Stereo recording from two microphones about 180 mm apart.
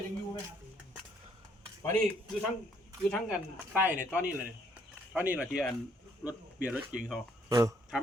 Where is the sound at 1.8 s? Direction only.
10° left (ahead or behind).